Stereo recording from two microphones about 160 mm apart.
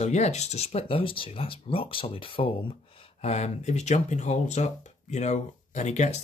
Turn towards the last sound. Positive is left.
turn(degrees=45)  # may be behind; listen again after turning